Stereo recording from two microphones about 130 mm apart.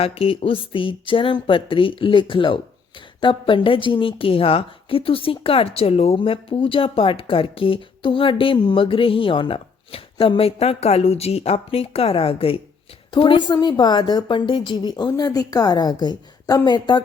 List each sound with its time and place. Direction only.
0.0 s a woman's voice: 45° left (ahead or behind)